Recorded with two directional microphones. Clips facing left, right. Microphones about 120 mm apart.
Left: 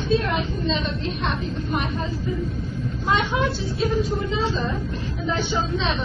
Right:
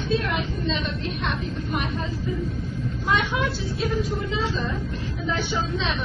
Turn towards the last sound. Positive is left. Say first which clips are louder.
# left 2 dB
turn(degrees=30)  # may be behind; listen again after turning